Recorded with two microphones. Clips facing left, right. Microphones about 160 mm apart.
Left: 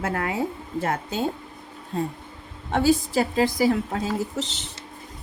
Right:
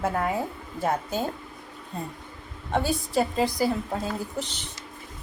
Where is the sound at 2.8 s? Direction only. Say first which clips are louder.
Left 4 dB; 90° left.